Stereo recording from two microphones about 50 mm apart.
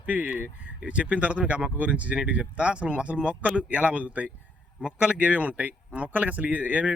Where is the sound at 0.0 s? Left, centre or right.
Right.